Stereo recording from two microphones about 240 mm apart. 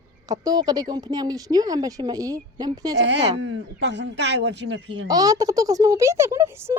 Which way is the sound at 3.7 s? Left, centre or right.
Right.